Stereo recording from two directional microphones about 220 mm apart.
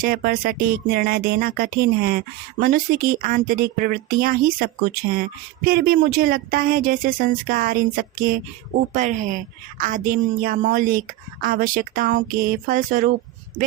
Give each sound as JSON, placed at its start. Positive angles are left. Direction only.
{"t": 0.0, "sound": "speech", "side_deg": -45}